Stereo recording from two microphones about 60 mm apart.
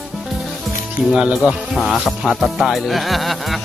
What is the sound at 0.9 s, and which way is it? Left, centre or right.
Speech, centre.